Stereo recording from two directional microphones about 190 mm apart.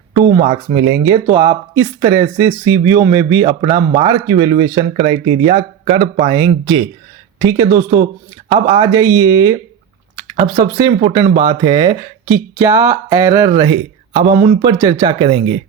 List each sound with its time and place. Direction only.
0.3 s speech: 30° right (ahead or behind)